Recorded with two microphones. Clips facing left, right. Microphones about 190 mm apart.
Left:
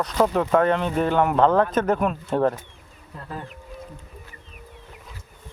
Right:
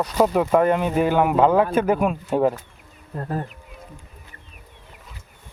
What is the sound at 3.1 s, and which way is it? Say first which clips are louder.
Speech: right 7 dB; 45° right (ahead or behind).